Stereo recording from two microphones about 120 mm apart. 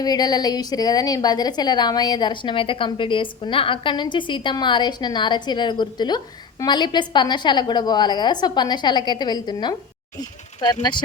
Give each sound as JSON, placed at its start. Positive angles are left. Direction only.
{"t": 0.0, "sound": "a woman's voice", "side_deg": 35}